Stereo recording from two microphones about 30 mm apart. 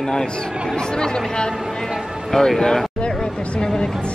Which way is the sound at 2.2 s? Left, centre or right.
Centre.